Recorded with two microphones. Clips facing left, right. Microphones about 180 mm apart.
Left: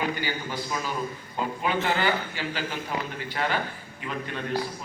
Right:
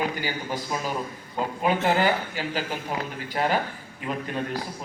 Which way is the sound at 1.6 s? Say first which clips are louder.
Right 4 dB; 45° right (ahead or behind).